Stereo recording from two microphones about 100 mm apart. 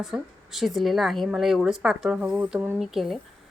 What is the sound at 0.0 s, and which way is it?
A woman's voice, 5° right (ahead or behind).